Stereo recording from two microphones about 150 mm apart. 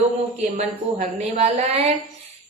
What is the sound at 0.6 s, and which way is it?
A woman's voice, 45° right (ahead or behind).